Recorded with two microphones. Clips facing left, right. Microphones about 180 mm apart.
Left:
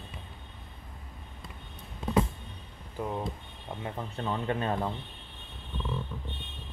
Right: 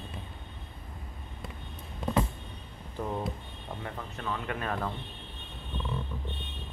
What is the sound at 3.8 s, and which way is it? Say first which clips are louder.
Speech: left 5 dB; 20° left (ahead or behind).